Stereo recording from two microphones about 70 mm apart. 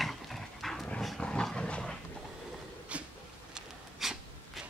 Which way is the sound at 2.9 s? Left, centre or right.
Centre.